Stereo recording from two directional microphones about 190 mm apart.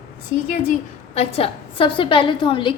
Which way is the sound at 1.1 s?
30° left (ahead or behind).